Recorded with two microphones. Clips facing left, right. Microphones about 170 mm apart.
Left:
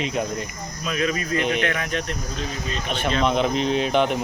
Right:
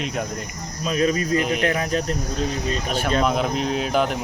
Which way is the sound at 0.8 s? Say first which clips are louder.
Right 4 dB; 35° right (ahead or behind).